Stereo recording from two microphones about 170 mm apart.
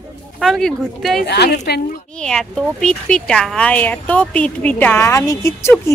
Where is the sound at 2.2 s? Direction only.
5° left (ahead or behind).